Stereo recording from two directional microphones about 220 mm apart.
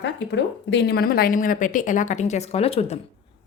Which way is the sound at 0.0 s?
55° left (ahead or behind).